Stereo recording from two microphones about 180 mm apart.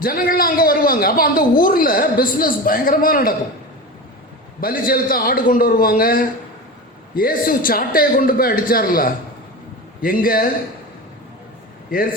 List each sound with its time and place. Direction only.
0.0 s a man's voice: 55° left (ahead or behind)
4.6 s a man's voice: 50° left (ahead or behind)